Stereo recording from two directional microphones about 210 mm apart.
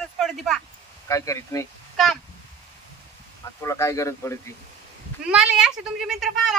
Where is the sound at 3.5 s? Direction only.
15° left (ahead or behind).